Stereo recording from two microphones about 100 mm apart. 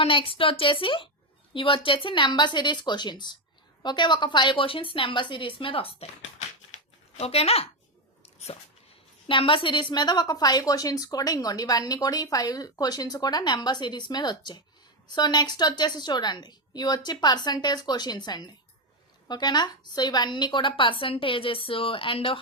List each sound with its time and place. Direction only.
0.0 s a woman's voice: 60° left (ahead or behind)
7.2 s speech: 90° left
8.2 s dog: 90° left
9.2 s a woman's voice: 65° left (ahead or behind)